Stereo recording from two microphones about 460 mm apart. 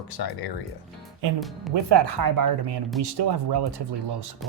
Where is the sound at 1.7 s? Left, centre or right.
Right.